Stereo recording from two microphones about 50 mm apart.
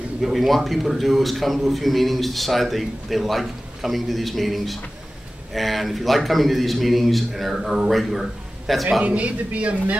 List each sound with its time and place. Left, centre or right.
0.2 s a man's voice: centre
9.0 s a man's voice: right